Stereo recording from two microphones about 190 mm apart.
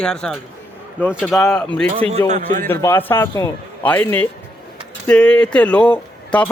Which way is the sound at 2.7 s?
10° left (ahead or behind).